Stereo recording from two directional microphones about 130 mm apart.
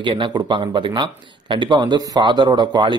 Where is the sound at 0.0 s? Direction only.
40° right (ahead or behind).